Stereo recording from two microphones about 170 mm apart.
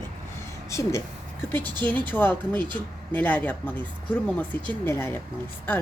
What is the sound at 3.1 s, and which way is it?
Speech, 10° left (ahead or behind).